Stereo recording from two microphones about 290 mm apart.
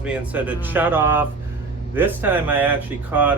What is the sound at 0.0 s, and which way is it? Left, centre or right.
Speech, centre.